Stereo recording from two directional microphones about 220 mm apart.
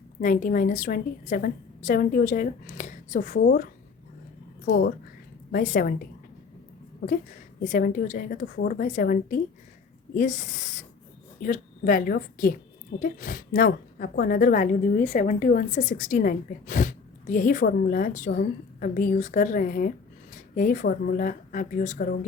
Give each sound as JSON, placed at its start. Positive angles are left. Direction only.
{"t": 0.2, "sound": "a woman's voice", "side_deg": 35}
{"t": 7.6, "sound": "a woman's voice", "side_deg": 40}